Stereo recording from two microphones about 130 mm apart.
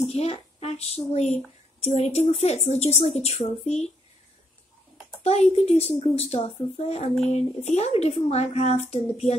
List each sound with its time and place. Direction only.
0.1 s speech: 55° left (ahead or behind)
5.2 s speech: 50° left (ahead or behind)